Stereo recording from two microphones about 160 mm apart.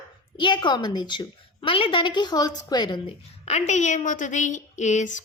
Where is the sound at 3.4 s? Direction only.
45° left (ahead or behind).